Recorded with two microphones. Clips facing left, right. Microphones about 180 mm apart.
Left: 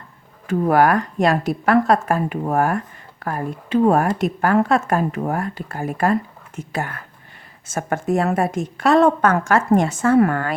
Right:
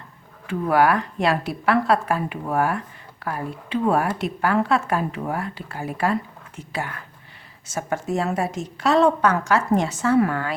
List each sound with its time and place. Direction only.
0.4 s a woman's voice: 45° left (ahead or behind)